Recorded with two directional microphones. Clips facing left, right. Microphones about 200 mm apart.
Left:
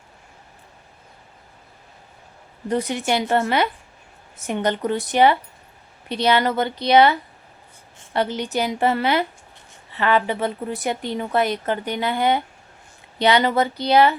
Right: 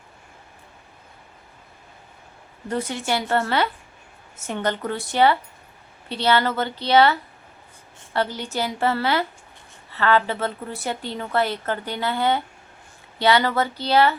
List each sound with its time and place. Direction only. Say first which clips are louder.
2.6 s a woman's voice: left 3 dB; 15° left (ahead or behind)